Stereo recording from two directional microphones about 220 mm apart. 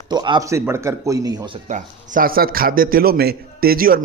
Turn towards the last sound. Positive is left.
turn(degrees=-40)  # may be behind; listen again after turning